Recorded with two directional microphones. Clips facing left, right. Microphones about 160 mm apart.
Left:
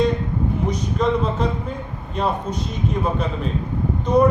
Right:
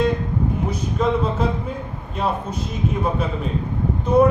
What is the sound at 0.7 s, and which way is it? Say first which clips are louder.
Speech: left 1 dB; 5° right (ahead or behind).